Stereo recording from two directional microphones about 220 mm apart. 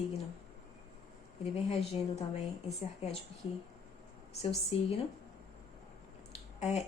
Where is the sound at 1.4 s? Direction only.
30° left (ahead or behind).